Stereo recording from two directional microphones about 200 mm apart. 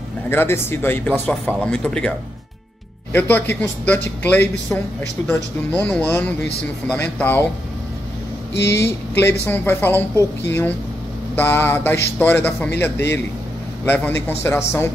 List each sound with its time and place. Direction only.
0.3 s speech: 10° left (ahead or behind)
8.6 s speech: 15° left (ahead or behind)